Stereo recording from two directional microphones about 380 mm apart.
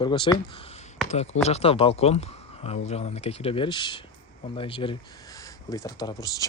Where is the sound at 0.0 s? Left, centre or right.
Centre.